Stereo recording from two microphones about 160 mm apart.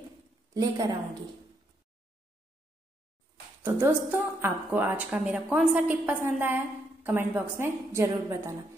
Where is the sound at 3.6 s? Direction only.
15° right (ahead or behind).